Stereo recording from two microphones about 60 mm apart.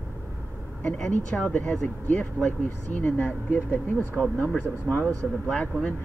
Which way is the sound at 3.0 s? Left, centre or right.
Left.